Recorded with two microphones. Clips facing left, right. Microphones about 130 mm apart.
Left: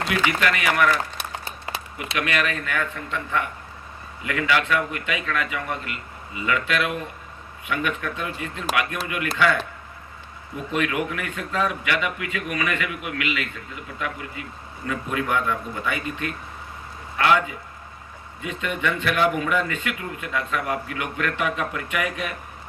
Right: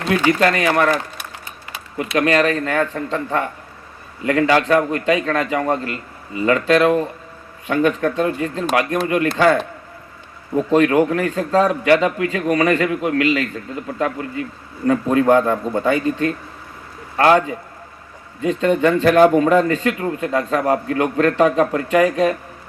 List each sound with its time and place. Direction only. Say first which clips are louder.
0.1 s a man's voice: right 9 dB; 35° right (ahead or behind)
1.2 s applause: left 2 dB; 30° left (ahead or behind)
2.1 s a man's voice: right 9 dB; 35° right (ahead or behind)
10.7 s a man's voice: right 10 dB; 35° right (ahead or behind)